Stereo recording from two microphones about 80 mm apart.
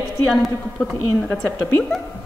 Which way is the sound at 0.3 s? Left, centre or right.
Centre.